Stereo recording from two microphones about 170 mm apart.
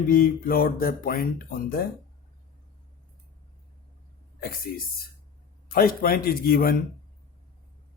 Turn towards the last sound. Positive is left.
turn(degrees=60)  # may be behind; listen again after turning